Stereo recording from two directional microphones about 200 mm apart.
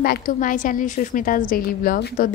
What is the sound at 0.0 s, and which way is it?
A woman's voice, 45° left (ahead or behind).